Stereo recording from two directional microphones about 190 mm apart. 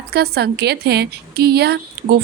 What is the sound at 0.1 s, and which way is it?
A woman's voice, 55° right (ahead or behind).